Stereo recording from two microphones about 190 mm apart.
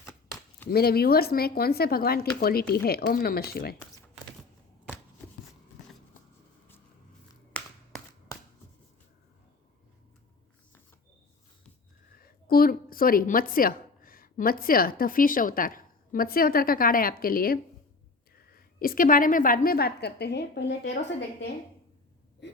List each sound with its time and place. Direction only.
0.7 s a woman's voice: 55° left (ahead or behind)
7.6 s a sound: 5° left (ahead or behind)
12.1 s a woman's voice: 50° left (ahead or behind)